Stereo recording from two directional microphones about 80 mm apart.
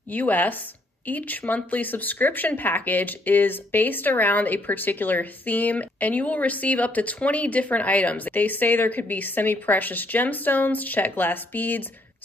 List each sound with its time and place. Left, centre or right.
0.1 s speech: left